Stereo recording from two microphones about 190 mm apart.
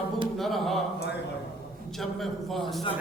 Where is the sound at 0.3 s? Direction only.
Centre (ahead or behind).